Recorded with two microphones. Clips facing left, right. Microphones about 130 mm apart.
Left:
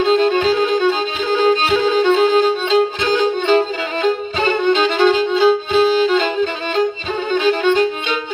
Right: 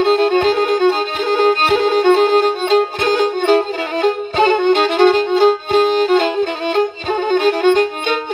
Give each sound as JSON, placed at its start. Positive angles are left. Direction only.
{"t": 0.0, "sound": "music", "side_deg": -55}
{"t": 4.0, "sound": "violin", "side_deg": -60}